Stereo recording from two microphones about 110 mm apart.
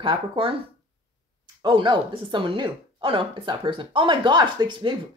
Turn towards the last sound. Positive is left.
turn(degrees=-45)  # may be behind; listen again after turning